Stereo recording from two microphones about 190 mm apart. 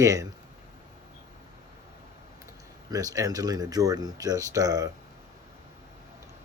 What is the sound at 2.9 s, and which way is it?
Speech, 20° right (ahead or behind).